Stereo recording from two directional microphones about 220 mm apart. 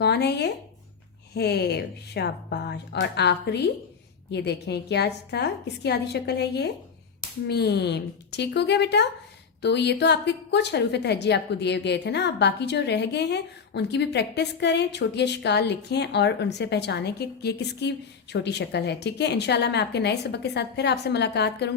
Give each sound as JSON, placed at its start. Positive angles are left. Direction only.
{"t": 0.0, "sound": "a woman's voice", "side_deg": 50}